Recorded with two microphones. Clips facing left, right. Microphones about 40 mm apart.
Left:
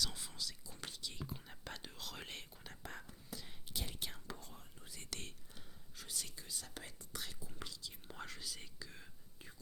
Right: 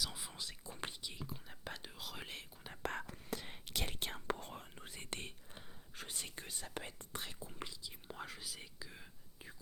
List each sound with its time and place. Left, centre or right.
0.0 s whispering: centre
0.3 s whispering: right
1.2 s whispering: centre
2.8 s whispering: right
4.9 s whispering: right
6.6 s speech: right
7.6 s speech: centre